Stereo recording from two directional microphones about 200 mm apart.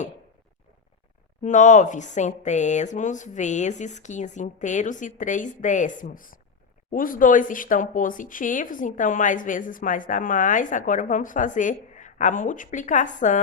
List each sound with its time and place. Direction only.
1.4 s speech: 40° left (ahead or behind)